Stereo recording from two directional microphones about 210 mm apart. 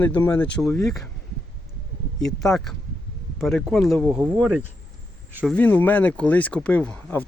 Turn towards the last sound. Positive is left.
turn(degrees=5)  # may be behind; listen again after turning